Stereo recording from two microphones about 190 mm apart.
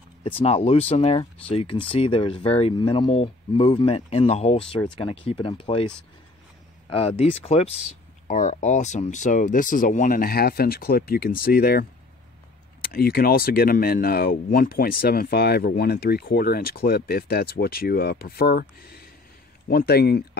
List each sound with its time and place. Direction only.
0.2 s speech: 30° left (ahead or behind)
6.9 s speech: 30° left (ahead or behind); by 11.8 s 50° left (ahead or behind)
12.8 s speech: 50° left (ahead or behind)